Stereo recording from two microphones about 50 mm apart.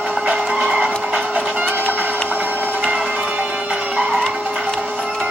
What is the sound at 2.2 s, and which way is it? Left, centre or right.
Printer, right.